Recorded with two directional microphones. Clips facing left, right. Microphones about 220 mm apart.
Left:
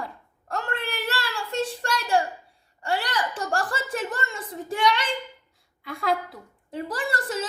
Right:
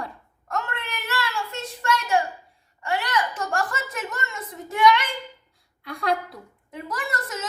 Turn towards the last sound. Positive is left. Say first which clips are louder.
# left 3 dB
turn(degrees=30)  # may be behind; listen again after turning